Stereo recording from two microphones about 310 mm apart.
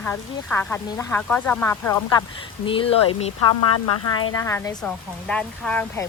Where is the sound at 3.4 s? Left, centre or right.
Left.